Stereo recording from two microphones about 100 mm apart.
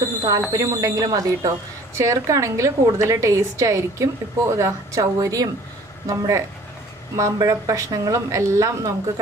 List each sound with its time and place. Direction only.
0.2 s a woman's voice: 40° right (ahead or behind)
7.4 s a woman's voice: 35° right (ahead or behind)